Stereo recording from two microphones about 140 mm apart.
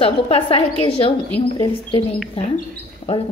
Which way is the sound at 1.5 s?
30° left (ahead or behind).